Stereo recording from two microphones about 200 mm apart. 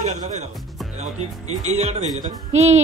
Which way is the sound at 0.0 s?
35° right (ahead or behind).